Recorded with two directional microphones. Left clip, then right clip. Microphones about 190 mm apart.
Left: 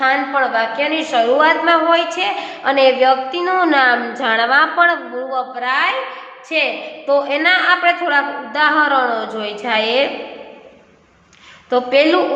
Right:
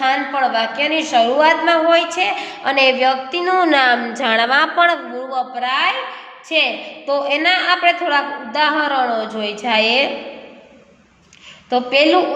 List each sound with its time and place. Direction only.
0.0 s a woman's voice: 20° right (ahead or behind)
11.7 s a woman's voice: 15° right (ahead or behind)